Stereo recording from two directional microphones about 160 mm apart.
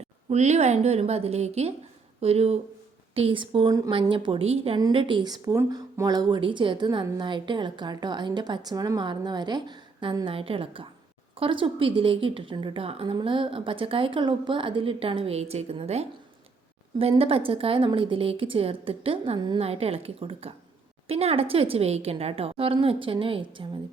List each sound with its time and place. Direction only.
0.0 s a woman's voice: 45° right (ahead or behind)